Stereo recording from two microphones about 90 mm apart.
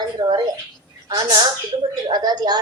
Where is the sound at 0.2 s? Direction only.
55° right (ahead or behind).